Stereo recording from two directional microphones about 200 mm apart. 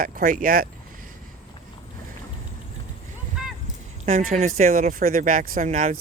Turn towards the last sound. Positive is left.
turn(degrees=-40)  # may be behind; listen again after turning